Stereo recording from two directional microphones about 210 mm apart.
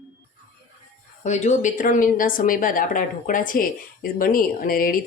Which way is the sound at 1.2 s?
35° left (ahead or behind).